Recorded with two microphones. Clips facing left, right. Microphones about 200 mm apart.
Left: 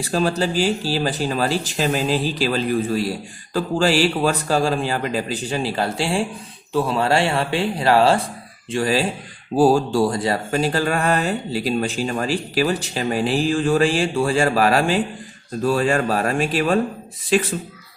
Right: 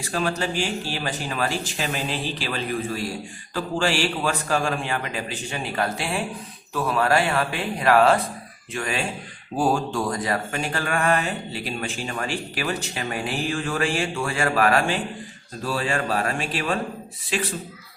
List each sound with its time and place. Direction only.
0.1 s a man's voice: 35° left (ahead or behind)
15.6 s speech: 45° left (ahead or behind)